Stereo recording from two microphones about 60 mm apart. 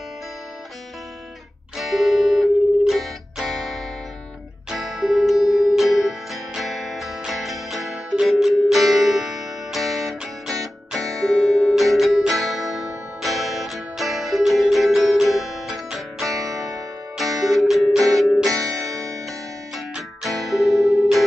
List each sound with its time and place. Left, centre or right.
1.8 s music: centre
18.6 s music: right
20.2 s music: centre